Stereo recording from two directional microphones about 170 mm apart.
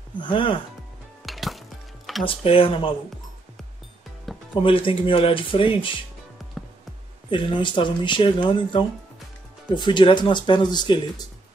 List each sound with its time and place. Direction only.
0.2 s speech: 30° left (ahead or behind)
1.2 s music: centre (ahead or behind)
2.2 s speech: 30° left (ahead or behind)
4.6 s speech: 30° left (ahead or behind)
7.2 s speech: 30° left (ahead or behind)